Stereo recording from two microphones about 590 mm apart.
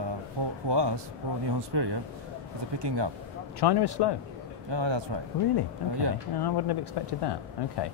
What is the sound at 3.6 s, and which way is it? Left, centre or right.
Speech, left.